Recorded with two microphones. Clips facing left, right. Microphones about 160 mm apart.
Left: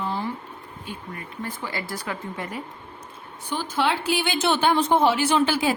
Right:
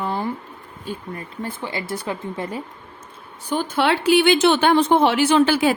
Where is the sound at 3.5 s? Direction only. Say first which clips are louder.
Right 4 dB; 60° right (ahead or behind).